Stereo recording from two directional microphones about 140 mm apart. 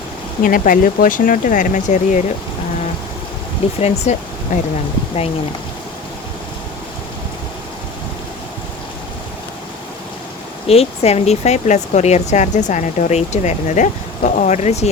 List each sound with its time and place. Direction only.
0.4 s speech: 80° left; by 2.2 s 60° left (ahead or behind)
3.8 s speech: 50° left (ahead or behind)
4.5 s speech: 70° left (ahead or behind)
10.7 s speech: 45° left (ahead or behind)